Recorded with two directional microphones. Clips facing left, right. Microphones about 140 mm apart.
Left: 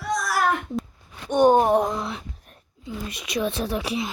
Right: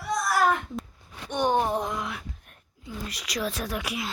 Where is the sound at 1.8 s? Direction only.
35° left (ahead or behind).